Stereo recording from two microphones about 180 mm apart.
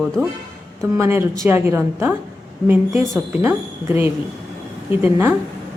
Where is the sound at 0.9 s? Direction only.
15° right (ahead or behind).